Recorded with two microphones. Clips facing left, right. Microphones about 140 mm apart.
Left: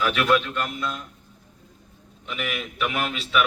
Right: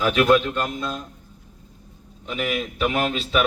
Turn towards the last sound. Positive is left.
turn(degrees=-35)  # may be behind; listen again after turning